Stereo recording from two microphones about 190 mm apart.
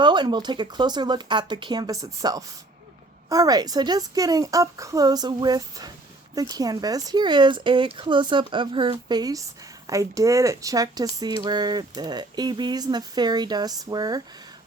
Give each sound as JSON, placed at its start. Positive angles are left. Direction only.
{"t": 0.0, "sound": "speech", "side_deg": -25}